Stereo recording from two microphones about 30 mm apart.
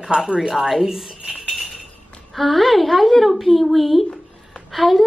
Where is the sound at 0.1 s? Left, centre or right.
Right.